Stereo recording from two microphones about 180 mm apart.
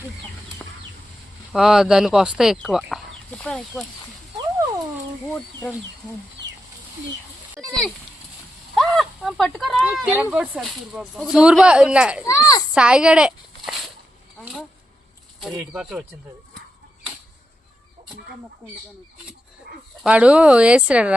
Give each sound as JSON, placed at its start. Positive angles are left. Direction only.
{"t": 1.5, "sound": "speech", "side_deg": -5}
{"t": 7.6, "sound": "speech", "side_deg": 0}
{"t": 12.2, "sound": "speech", "side_deg": 20}
{"t": 12.7, "sound": "speech", "side_deg": -5}
{"t": 20.0, "sound": "speech", "side_deg": -5}